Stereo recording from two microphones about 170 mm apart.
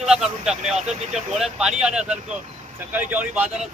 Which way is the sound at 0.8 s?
40° right (ahead or behind).